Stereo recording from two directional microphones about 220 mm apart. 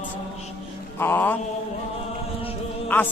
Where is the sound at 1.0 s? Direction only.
10° left (ahead or behind).